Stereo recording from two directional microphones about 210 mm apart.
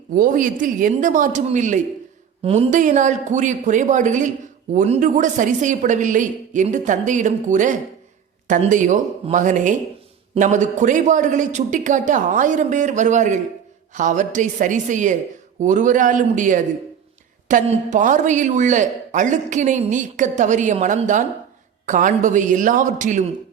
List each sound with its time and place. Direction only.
0.1 s speech: 40° right (ahead or behind)